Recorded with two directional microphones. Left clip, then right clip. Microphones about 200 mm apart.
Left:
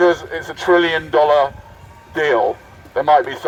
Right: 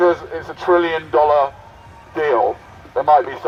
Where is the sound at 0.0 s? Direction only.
20° left (ahead or behind).